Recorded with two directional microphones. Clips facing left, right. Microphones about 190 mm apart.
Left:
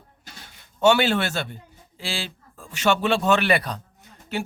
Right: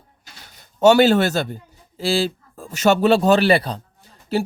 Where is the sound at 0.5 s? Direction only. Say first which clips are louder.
Right 5 dB; 40° right (ahead or behind).